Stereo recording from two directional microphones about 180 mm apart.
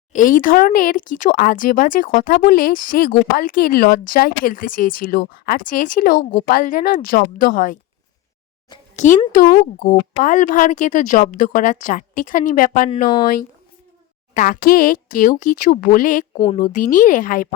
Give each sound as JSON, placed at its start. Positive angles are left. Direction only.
{"t": 0.1, "sound": "speech", "side_deg": 50}
{"t": 9.0, "sound": "speech", "side_deg": 45}
{"t": 14.3, "sound": "speech", "side_deg": 50}